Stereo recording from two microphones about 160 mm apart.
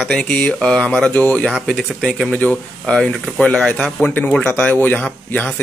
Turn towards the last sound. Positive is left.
turn(degrees=10)  # may be behind; listen again after turning